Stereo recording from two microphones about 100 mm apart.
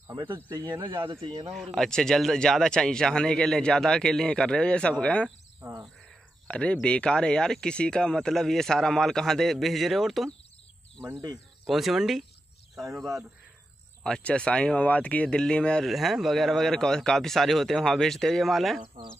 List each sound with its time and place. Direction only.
0.1 s speech: 50° right (ahead or behind)
0.6 s speech: 40° right (ahead or behind)
0.8 s speech: 55° right (ahead or behind)
1.5 s speech: centre (ahead or behind)
6.4 s speech: 10° left (ahead or behind)
11.6 s speech: centre (ahead or behind)
14.0 s speech: 10° left (ahead or behind)